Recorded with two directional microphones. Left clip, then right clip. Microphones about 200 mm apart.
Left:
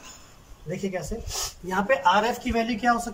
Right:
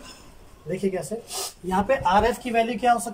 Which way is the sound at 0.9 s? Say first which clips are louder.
Right 1 dB; 20° right (ahead or behind).